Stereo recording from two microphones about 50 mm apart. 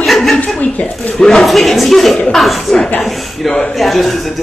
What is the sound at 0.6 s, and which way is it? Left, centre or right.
Speech, left.